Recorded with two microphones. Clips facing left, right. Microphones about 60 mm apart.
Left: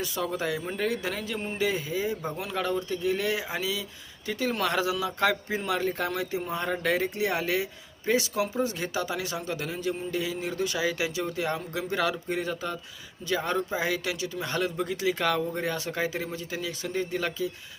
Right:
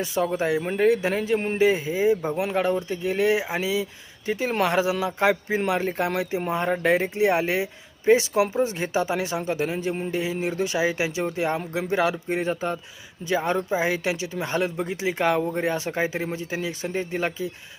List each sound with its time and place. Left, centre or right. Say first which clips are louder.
0.0 s speech: right 6 dB; right